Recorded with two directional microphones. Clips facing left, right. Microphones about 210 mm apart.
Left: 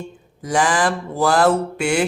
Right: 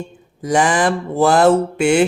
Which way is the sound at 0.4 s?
20° right (ahead or behind).